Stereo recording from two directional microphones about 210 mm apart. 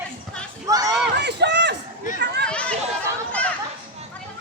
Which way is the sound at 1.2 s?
55° right (ahead or behind).